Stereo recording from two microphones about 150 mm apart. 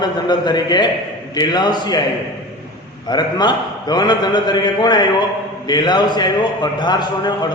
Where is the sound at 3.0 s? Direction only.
30° left (ahead or behind).